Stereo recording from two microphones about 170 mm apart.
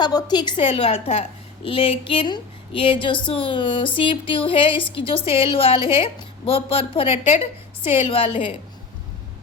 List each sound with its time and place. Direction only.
0.0 s a woman's voice: 25° left (ahead or behind)